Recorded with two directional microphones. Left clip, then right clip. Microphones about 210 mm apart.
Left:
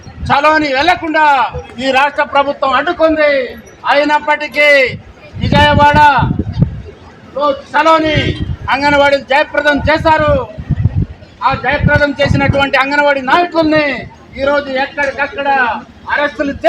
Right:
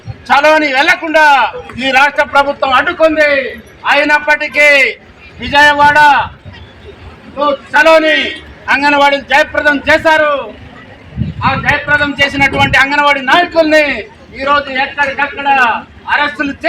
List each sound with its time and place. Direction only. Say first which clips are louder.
0.3 s a man's voice: right 2 dB; 5° right (ahead or behind)
7.7 s a man's voice: right 4 dB; 5° right (ahead or behind)
11.4 s a man's voice: right 1 dB; 5° right (ahead or behind)
16.0 s a man's voice: right 1 dB; 35° right (ahead or behind)